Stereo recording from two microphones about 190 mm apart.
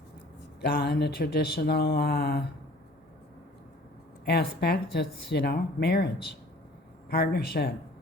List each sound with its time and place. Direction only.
0.6 s speech: 50° left (ahead or behind)
4.3 s speech: 60° left (ahead or behind)
7.1 s speech: 55° left (ahead or behind)